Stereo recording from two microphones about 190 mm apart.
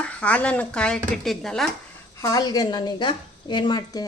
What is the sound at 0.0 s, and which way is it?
Speech, 5° left (ahead or behind).